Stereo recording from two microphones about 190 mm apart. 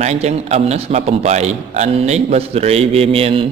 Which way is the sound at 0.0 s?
35° right (ahead or behind).